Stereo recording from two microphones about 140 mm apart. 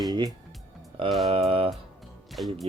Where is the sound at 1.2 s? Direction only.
45° right (ahead or behind).